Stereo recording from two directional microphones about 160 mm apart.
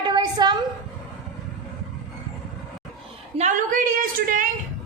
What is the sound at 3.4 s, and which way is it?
A woman's voice, 55° right (ahead or behind).